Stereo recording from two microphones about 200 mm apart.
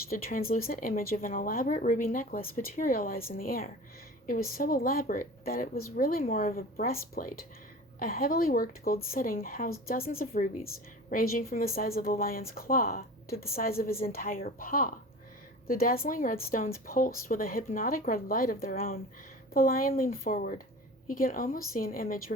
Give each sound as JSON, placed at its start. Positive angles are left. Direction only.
{"t": 0.1, "sound": "speech", "side_deg": 45}